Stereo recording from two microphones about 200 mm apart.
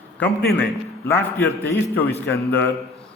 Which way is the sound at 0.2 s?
10° left (ahead or behind).